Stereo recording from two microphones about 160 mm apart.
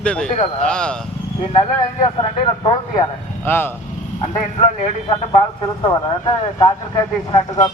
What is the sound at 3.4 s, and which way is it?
Speech, 15° left (ahead or behind).